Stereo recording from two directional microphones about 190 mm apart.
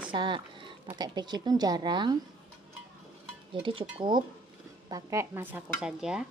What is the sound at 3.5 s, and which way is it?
Cowbell, 25° right (ahead or behind).